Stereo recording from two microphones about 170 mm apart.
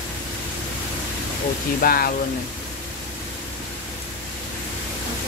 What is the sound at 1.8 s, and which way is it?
Speech, 60° left (ahead or behind).